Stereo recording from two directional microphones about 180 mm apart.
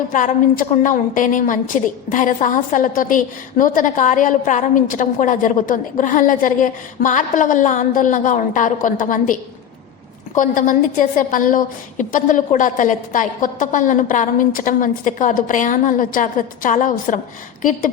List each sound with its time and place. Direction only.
0.1 s a woman's voice: 45° left (ahead or behind)